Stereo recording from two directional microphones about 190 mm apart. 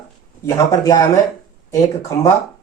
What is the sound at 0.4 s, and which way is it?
Speech, 20° left (ahead or behind).